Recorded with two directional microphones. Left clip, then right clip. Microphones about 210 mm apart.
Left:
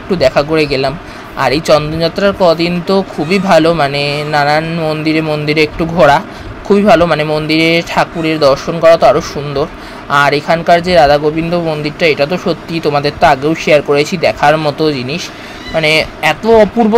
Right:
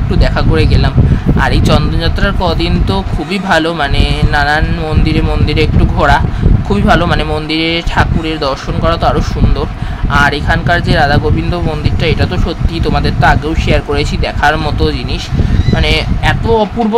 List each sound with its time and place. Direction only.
0.1 s speech: 15° left (ahead or behind)